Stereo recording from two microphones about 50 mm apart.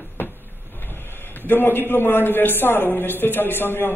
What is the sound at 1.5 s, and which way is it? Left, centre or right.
A man's voice, left.